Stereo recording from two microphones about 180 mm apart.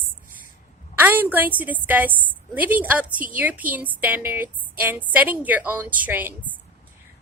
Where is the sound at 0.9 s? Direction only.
10° right (ahead or behind).